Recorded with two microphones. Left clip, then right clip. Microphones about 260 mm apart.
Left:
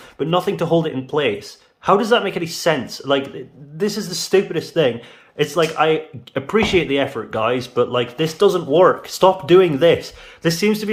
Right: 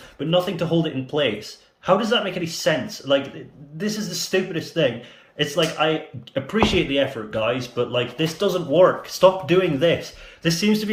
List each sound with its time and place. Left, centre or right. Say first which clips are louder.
0.2 s speech: left 2 dB; centre